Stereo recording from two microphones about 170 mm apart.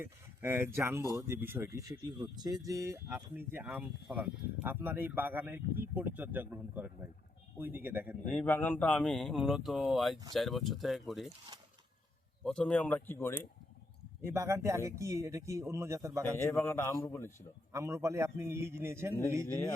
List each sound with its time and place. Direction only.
0.0 s speech: 15° right (ahead or behind)
8.3 s speech: 10° left (ahead or behind)
12.5 s speech: 5° left (ahead or behind)
14.2 s speech: 15° right (ahead or behind)
16.4 s speech: 15° left (ahead or behind)
17.7 s speech: 15° right (ahead or behind)